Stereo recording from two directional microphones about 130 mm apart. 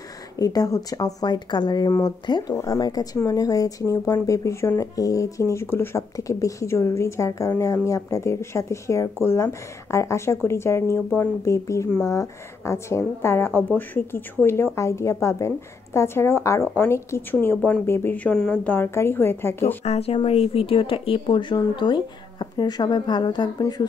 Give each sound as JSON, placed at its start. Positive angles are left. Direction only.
{"t": 0.4, "sound": "a woman's voice", "side_deg": 30}
{"t": 19.8, "sound": "speech", "side_deg": 55}